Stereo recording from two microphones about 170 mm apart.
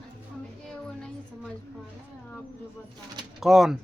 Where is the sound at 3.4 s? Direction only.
Centre (ahead or behind).